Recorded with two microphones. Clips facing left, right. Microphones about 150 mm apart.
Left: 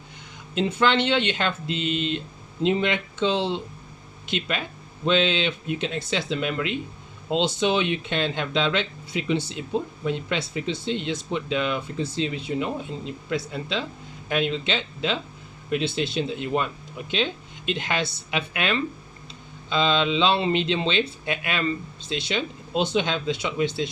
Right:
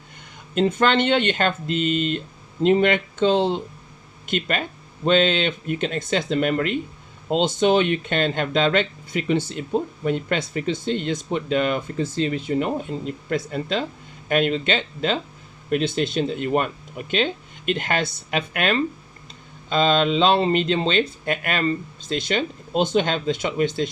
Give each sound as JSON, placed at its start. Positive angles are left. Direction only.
{"t": 0.5, "sound": "speech", "side_deg": -50}
{"t": 17.7, "sound": "speech", "side_deg": -50}